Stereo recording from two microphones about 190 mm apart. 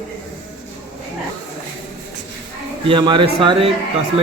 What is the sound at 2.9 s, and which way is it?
Speech, 25° right (ahead or behind).